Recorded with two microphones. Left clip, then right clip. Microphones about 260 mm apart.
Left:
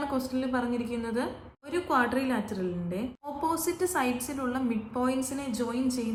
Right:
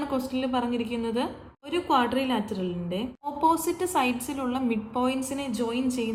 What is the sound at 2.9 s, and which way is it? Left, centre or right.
A woman's voice, right.